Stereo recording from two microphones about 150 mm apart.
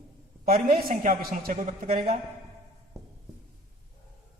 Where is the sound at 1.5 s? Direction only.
60° right (ahead or behind).